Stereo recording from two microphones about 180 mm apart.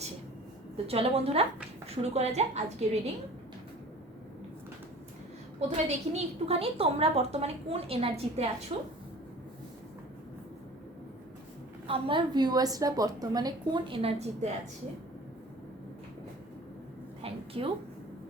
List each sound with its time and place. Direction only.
0.9 s a woman's voice: 35° right (ahead or behind)
5.5 s a woman's voice: 35° right (ahead or behind)
11.9 s a woman's voice: 30° right (ahead or behind)
17.2 s a sound: 30° right (ahead or behind)